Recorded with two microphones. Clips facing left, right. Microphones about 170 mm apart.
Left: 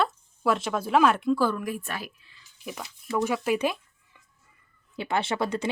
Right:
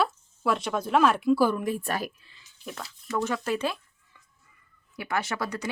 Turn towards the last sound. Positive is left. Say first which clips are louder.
# left 4 dB
turn(degrees=25)  # may be behind; listen again after turning